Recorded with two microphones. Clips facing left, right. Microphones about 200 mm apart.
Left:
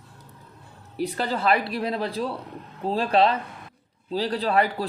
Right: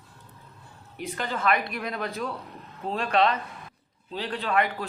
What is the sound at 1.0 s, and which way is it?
Speech, 35° left (ahead or behind).